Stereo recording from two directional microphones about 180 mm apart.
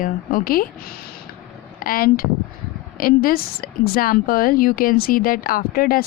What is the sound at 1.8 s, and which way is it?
A woman's voice, 50° left (ahead or behind).